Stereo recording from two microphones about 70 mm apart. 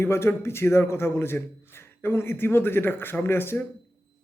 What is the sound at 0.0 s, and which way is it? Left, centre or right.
A man's voice, left.